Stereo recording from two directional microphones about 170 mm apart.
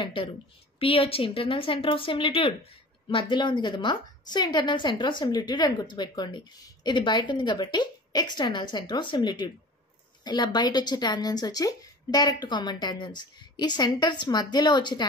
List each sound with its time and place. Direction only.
0.0 s a woman's voice: 30° left (ahead or behind)